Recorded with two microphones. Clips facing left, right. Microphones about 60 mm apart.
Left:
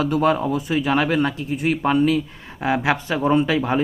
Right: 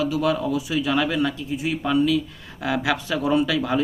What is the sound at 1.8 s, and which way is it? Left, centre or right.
Speech, left.